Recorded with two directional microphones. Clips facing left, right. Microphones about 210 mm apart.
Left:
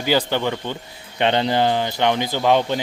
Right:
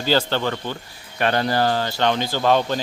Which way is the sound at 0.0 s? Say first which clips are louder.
Left 1 dB; 15° left (ahead or behind).